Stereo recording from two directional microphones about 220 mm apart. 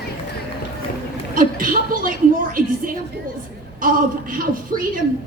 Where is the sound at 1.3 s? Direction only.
40° right (ahead or behind).